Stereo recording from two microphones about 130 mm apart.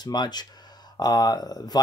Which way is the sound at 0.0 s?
30° left (ahead or behind).